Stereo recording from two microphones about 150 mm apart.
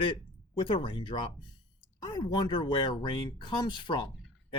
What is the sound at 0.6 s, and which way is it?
Speech, 35° left (ahead or behind).